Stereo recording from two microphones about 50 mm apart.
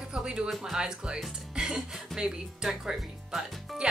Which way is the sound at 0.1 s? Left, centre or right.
Centre.